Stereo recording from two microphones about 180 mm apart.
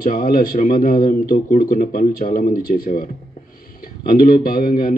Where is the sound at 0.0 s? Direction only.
50° left (ahead or behind).